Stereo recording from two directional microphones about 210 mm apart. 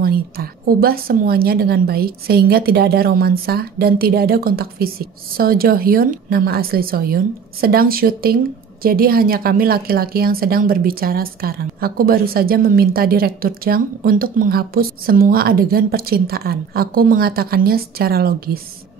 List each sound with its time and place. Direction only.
0.0 s a woman's voice: 45° right (ahead or behind)